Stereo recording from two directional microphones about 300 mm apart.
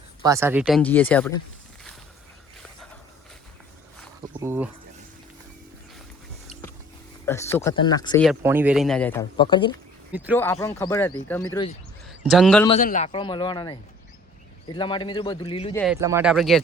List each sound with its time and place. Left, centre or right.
0.2 s speech: centre
4.4 s speech: centre
7.3 s speech: centre
8.2 s speech: centre
10.1 s speech: centre
10.3 s speech: centre
12.0 s speech: centre
12.6 s speech: left
15.8 s speech: centre